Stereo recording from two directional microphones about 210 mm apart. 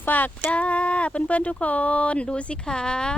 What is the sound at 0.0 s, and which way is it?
Speech, 10° left (ahead or behind).